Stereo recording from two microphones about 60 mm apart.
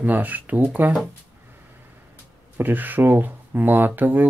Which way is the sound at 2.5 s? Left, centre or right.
Right.